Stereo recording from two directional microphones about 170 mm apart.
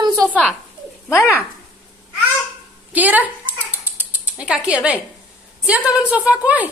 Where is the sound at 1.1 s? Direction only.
15° left (ahead or behind).